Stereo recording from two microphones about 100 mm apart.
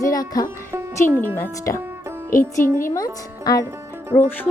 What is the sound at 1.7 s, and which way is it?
Music, 25° left (ahead or behind).